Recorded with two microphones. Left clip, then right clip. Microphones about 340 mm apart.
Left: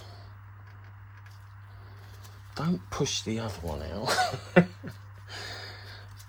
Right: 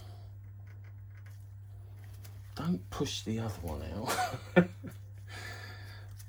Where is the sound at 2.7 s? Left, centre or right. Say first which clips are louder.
Left 5 dB; left.